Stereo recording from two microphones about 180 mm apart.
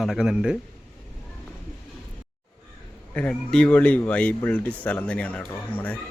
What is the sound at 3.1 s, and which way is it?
Speech, 10° left (ahead or behind).